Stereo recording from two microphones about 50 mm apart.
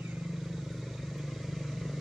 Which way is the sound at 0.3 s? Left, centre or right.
Centre.